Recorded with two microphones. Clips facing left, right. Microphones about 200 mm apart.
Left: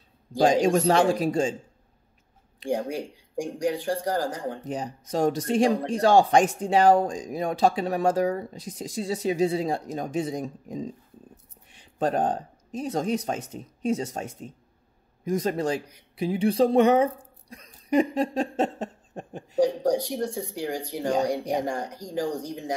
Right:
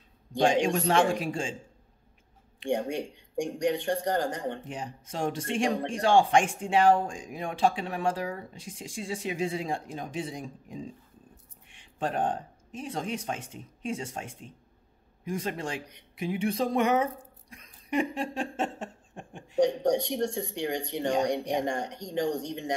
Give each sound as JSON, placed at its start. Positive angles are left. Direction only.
{"t": 0.4, "sound": "speech", "side_deg": 40}
{"t": 2.7, "sound": "speech", "side_deg": 0}
{"t": 4.6, "sound": "speech", "side_deg": 40}
{"t": 19.6, "sound": "speech", "side_deg": 0}